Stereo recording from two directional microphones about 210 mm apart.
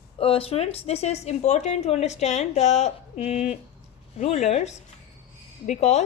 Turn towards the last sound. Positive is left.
turn(degrees=35)  # may be behind; listen again after turning